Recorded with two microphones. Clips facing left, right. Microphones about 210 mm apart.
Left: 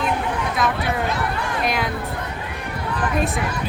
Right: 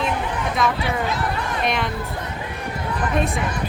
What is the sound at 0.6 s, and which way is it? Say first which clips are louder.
Speech: even; centre (ahead or behind).